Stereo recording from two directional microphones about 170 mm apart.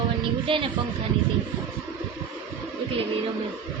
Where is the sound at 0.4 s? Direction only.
30° right (ahead or behind).